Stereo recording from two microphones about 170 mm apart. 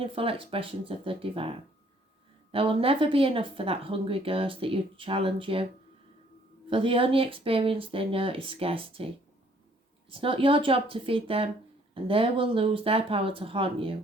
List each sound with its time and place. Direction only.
0.0 s speech: 35° right (ahead or behind)
6.7 s speech: 30° right (ahead or behind)
10.1 s speech: 30° right (ahead or behind)